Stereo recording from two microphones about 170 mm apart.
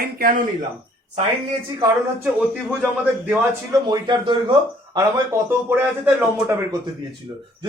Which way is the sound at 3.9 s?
25° right (ahead or behind).